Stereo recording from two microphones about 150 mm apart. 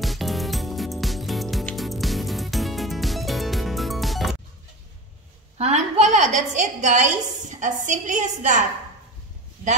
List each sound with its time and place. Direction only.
0.0 s music: centre (ahead or behind)
5.6 s a woman's voice: 50° right (ahead or behind)